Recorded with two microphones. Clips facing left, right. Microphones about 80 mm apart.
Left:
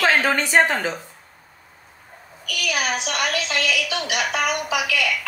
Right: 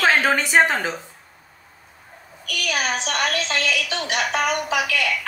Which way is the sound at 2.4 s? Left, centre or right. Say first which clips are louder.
Even; right.